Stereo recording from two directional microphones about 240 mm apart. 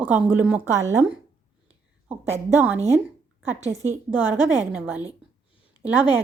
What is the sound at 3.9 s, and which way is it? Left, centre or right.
Speech, centre.